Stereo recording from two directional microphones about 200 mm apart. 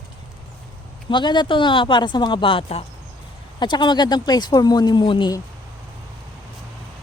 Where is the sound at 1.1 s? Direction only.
20° left (ahead or behind).